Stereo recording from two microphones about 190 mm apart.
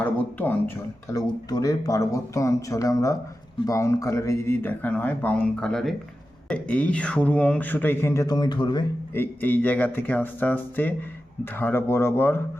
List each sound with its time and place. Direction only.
0.0 s speech: 10° left (ahead or behind)
9.1 s speech: 10° left (ahead or behind)